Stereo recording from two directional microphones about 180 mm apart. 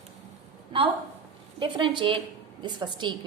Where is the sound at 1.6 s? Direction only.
30° right (ahead or behind).